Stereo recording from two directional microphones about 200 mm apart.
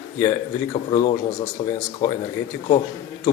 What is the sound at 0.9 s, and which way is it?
Speech, 30° left (ahead or behind).